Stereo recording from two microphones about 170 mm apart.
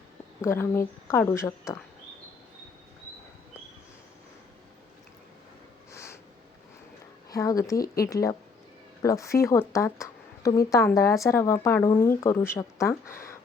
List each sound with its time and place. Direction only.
0.4 s speech: 15° left (ahead or behind)
5.9 s sniff: 15° left (ahead or behind)
7.3 s a woman's voice: 20° left (ahead or behind)